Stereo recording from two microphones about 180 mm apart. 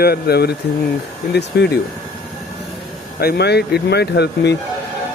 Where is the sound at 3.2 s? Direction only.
65° left (ahead or behind).